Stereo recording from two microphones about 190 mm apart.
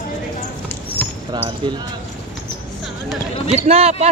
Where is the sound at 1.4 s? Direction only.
25° right (ahead or behind).